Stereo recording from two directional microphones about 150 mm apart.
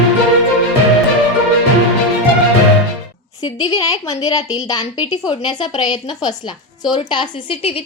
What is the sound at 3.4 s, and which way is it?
A woman's voice, 25° left (ahead or behind).